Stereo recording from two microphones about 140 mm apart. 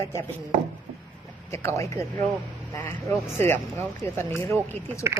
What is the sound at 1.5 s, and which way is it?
Speech, 20° left (ahead or behind).